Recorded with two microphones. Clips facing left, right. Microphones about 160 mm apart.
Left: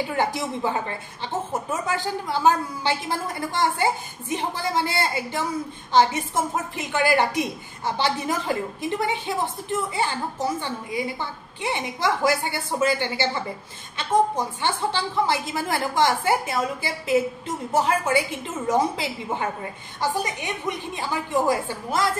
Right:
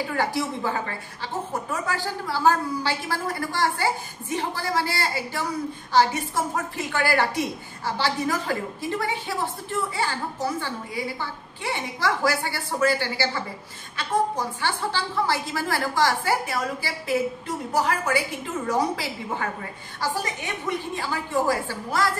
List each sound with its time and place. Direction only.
0.1 s a woman's voice: 20° left (ahead or behind)